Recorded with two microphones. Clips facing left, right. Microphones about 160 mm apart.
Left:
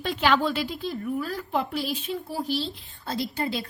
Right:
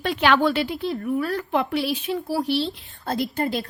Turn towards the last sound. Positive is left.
turn(degrees=-50)  # may be behind; listen again after turning